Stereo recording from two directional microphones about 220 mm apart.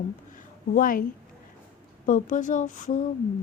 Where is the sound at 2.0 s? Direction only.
35° left (ahead or behind).